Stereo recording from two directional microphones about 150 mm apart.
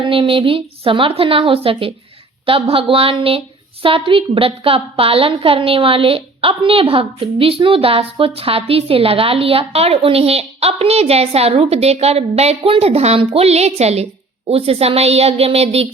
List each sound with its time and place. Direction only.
0.0 s a woman's voice: 35° right (ahead or behind)